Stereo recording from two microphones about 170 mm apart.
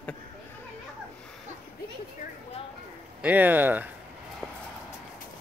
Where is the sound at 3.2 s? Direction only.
10° right (ahead or behind).